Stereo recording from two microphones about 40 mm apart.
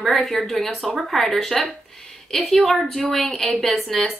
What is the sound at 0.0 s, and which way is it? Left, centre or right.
A woman's voice, centre.